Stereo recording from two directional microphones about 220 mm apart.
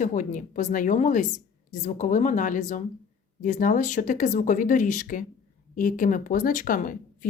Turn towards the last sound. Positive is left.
turn(degrees=40)  # may be behind; listen again after turning